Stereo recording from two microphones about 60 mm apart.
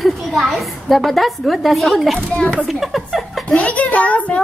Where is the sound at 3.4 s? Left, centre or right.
Left.